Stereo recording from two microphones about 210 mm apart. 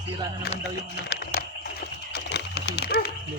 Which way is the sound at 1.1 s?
45° left (ahead or behind).